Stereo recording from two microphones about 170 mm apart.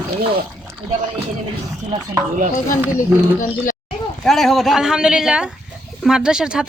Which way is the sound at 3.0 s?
50° left (ahead or behind).